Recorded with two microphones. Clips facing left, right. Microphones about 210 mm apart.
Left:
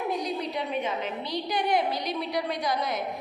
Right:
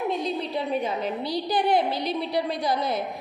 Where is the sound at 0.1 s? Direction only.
25° right (ahead or behind).